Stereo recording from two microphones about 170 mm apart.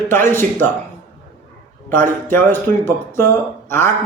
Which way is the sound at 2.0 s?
15° left (ahead or behind).